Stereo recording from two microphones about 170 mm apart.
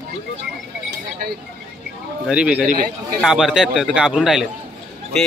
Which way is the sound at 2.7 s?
50° right (ahead or behind).